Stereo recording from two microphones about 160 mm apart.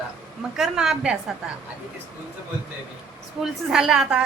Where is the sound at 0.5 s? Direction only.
5° right (ahead or behind).